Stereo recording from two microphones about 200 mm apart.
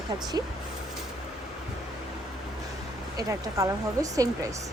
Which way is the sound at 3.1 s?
15° right (ahead or behind).